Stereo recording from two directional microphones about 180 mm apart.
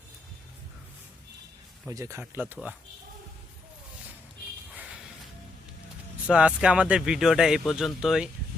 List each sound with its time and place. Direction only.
1.9 s speech: 15° right (ahead or behind)
4.7 s a sound: 5° right (ahead or behind)
6.2 s speech: 5° right (ahead or behind)